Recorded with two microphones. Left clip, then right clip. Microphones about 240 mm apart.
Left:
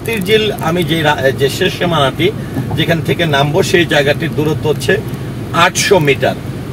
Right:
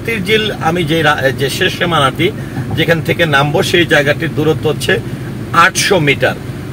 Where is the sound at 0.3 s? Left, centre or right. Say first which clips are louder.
Left 1 dB; right.